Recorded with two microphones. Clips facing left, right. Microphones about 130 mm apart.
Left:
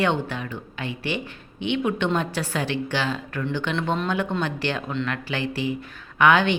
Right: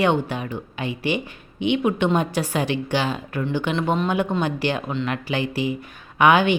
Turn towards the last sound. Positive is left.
turn(degrees=-15)  # may be behind; listen again after turning